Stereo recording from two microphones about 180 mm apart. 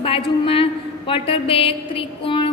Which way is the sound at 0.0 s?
30° left (ahead or behind).